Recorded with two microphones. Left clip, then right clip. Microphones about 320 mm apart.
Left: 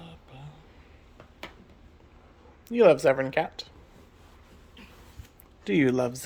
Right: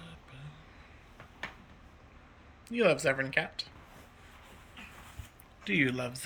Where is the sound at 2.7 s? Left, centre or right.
Centre.